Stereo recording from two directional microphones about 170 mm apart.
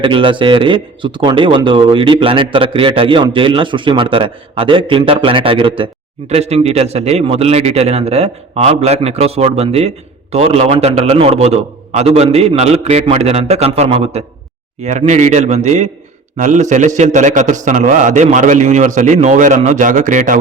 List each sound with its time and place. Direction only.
0.0 s a man's voice: 30° right (ahead or behind); by 20.4 s 50° right (ahead or behind)